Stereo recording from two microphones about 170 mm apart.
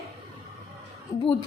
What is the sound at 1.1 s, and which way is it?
Speech, 20° left (ahead or behind).